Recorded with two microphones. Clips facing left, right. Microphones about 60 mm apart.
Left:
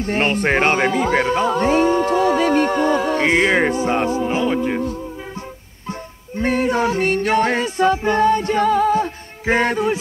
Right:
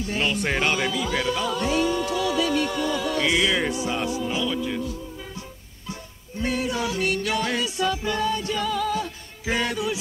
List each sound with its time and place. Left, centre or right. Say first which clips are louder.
0.0 s music: left 7 dB; left